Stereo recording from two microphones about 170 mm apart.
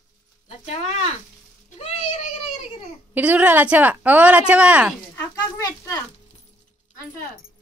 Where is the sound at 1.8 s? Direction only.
35° left (ahead or behind).